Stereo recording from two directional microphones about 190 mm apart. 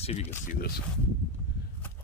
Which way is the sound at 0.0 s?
35° left (ahead or behind).